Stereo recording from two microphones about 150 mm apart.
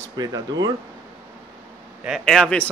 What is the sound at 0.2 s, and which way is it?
Speech, 25° right (ahead or behind).